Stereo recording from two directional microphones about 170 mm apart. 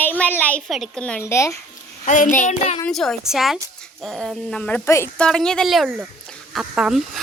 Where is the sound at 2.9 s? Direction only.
Centre (ahead or behind).